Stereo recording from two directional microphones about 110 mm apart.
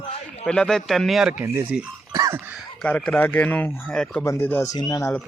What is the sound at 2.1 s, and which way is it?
Cough, 30° right (ahead or behind).